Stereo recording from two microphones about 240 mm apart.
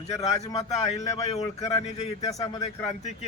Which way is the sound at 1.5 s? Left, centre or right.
Centre.